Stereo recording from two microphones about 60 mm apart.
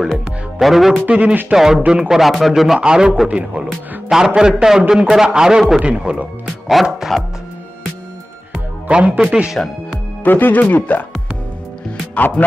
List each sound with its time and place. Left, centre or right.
0.0 s speech: centre
1.0 s speech: centre
1.5 s a man's voice: centre
6.7 s speech: centre
8.8 s speech: right
9.2 s a man's voice: centre
10.2 s speech: left
12.4 s speech: left